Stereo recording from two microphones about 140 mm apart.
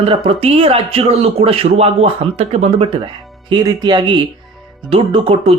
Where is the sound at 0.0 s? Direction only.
45° right (ahead or behind).